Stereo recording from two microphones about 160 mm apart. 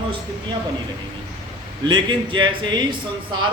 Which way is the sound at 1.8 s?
30° right (ahead or behind).